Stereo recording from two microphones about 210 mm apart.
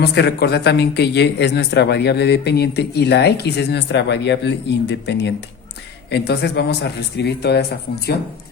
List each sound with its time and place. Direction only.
0.0 s speech: 50° left (ahead or behind)